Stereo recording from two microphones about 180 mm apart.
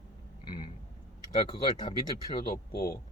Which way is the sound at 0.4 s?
25° left (ahead or behind).